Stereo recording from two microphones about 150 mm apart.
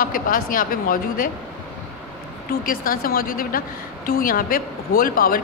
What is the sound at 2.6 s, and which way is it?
A woman's voice, 70° left (ahead or behind).